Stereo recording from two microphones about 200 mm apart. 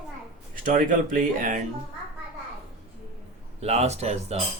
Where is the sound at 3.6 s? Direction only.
35° right (ahead or behind).